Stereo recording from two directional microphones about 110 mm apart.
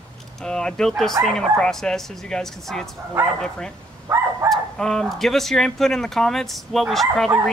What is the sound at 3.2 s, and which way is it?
Speech, 20° right (ahead or behind).